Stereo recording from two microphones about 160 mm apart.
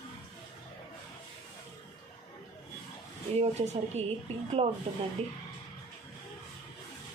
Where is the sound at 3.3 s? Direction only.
45° right (ahead or behind).